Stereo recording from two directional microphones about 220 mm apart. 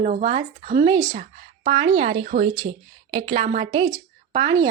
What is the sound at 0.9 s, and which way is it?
A woman's voice, 15° right (ahead or behind).